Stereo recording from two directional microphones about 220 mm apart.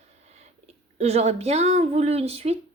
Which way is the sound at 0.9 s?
30° right (ahead or behind).